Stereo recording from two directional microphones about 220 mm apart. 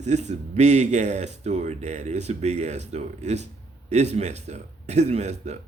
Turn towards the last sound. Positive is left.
turn(degrees=-30)  # may be behind; listen again after turning